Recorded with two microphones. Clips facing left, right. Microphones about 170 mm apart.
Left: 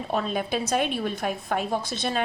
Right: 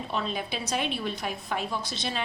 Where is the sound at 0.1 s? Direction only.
50° left (ahead or behind).